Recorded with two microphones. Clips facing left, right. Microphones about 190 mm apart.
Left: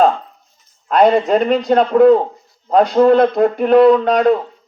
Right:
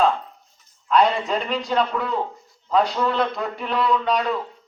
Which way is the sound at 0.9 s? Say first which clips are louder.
Left 7 dB; 50° left (ahead or behind).